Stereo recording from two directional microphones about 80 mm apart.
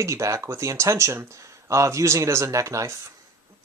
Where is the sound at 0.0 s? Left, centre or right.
Right.